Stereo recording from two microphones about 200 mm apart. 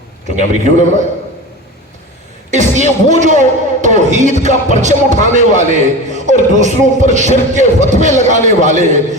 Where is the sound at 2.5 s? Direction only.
35° right (ahead or behind).